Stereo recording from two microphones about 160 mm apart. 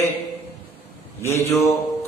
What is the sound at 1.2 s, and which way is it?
Speech, 15° left (ahead or behind).